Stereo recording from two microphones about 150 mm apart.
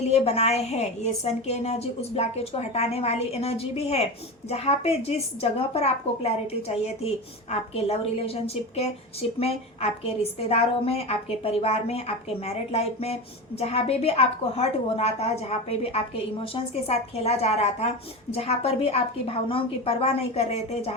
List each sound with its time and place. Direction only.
0.0 s a woman's voice: 45° left (ahead or behind)